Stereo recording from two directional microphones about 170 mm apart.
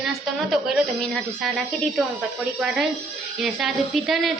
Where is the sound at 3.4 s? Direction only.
Centre (ahead or behind).